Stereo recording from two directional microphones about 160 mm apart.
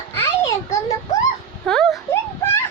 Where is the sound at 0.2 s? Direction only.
20° left (ahead or behind).